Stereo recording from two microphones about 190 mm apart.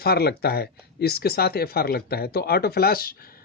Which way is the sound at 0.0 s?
55° left (ahead or behind).